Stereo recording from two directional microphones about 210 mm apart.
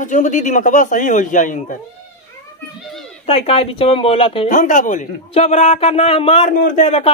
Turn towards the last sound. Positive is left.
turn(degrees=35)  # may be behind; listen again after turning